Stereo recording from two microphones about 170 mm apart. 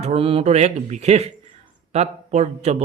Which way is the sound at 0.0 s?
35° right (ahead or behind).